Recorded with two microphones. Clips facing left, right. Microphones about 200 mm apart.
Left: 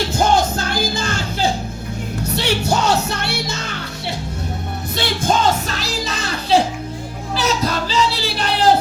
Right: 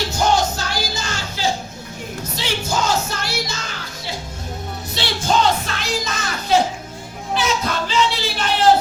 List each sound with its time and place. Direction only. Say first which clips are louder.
0.1 s music: left 1 dB; 55° left (ahead or behind)
4.9 s music: left 1 dB; 50° left (ahead or behind)